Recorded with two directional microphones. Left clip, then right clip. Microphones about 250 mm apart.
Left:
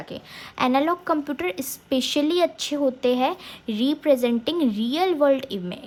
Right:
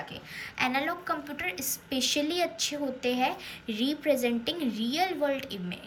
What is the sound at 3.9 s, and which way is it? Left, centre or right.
A woman's voice, centre.